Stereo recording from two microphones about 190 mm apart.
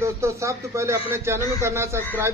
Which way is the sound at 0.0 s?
15° right (ahead or behind).